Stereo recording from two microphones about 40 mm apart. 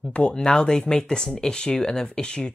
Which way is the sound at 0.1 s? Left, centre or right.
Left.